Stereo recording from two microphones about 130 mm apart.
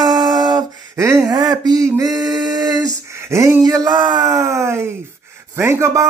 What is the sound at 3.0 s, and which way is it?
Speech, 20° right (ahead or behind).